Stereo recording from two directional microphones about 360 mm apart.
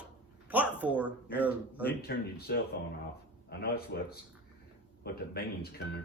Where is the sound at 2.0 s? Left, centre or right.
Left.